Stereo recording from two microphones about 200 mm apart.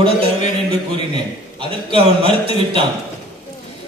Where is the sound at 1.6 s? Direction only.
25° right (ahead or behind).